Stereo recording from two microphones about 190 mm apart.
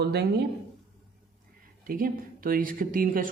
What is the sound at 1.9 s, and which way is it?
Speech, 45° right (ahead or behind).